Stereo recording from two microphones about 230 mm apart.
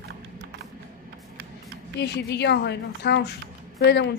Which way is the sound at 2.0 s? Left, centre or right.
Left.